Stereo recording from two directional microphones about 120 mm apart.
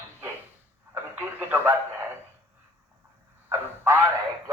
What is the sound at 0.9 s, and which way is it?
A man's voice, 20° right (ahead or behind).